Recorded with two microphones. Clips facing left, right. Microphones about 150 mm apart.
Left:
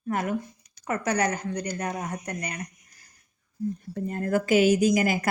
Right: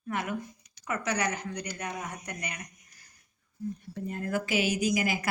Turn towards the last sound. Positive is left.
turn(degrees=45)  # may be behind; listen again after turning